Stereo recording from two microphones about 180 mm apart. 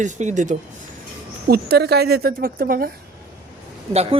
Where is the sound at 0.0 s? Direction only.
40° right (ahead or behind).